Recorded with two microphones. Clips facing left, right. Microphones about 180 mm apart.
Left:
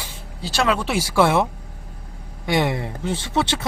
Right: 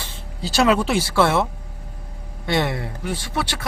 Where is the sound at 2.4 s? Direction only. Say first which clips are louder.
Left 1 dB; 15° left (ahead or behind).